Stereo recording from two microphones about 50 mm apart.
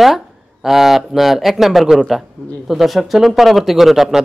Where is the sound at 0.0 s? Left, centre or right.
Centre.